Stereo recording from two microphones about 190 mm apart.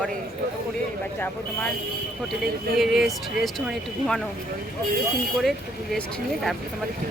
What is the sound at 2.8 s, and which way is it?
Speech, centre (ahead or behind).